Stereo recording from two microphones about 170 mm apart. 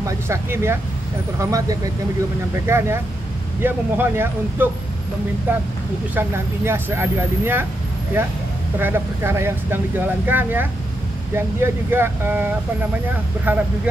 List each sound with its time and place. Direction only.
0.0 s speech: 15° right (ahead or behind)
8.7 s speech: 10° right (ahead or behind)